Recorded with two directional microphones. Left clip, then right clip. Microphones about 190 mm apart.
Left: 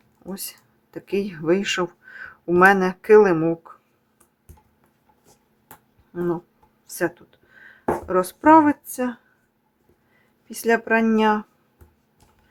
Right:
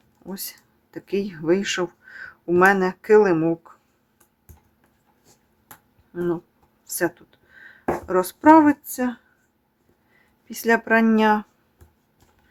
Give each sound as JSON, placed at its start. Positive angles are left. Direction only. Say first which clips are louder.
{"t": 0.2, "sound": "speech", "louder": "even", "side_deg": 0}
{"t": 6.1, "sound": "speech", "louder": "even", "side_deg": 0}